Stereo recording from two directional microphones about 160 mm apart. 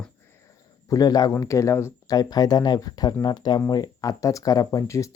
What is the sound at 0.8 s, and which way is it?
Speech, 25° left (ahead or behind).